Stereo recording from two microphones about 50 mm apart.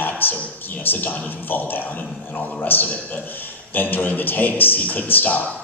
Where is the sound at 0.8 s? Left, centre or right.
Left.